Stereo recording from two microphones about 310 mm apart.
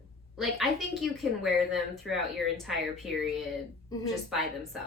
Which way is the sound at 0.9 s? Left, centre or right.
Centre.